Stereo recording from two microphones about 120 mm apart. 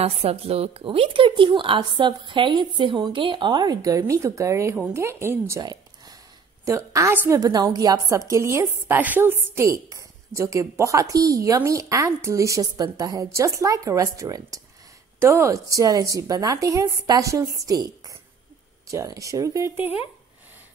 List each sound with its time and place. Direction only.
0.0 s a woman's voice: 55° right (ahead or behind); by 5.6 s 20° right (ahead or behind)
5.6 s a sound: 35° right (ahead or behind)
6.6 s a woman's voice: 25° right (ahead or behind)